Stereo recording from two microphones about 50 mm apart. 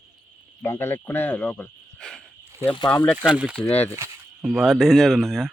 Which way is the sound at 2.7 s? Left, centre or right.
Left.